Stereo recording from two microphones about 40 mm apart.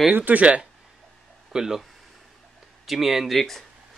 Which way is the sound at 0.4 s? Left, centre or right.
Right.